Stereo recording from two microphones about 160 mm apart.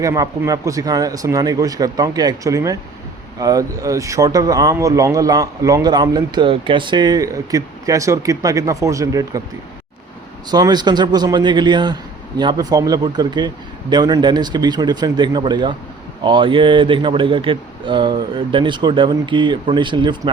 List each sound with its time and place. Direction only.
0.0 s speech: 20° right (ahead or behind)
10.5 s speech: 25° right (ahead or behind)